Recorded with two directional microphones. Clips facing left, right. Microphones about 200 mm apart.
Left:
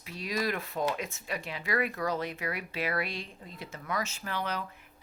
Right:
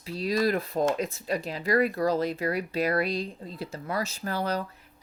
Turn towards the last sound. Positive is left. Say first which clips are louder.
# right 6 dB
turn(degrees=-40)  # may be behind; listen again after turning